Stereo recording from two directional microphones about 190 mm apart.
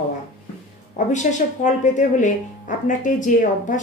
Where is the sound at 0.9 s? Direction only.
40° left (ahead or behind).